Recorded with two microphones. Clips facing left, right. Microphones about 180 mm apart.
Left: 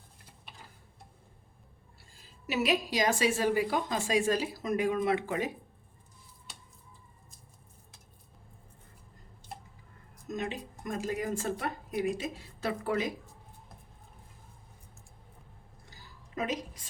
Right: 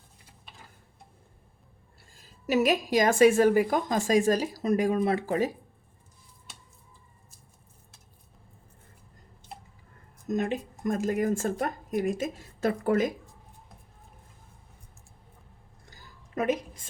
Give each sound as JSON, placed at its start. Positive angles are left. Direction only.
{"t": 2.5, "sound": "a woman's voice", "side_deg": -45}
{"t": 10.2, "sound": "a woman's voice", "side_deg": -50}
{"t": 15.9, "sound": "a sound", "side_deg": -50}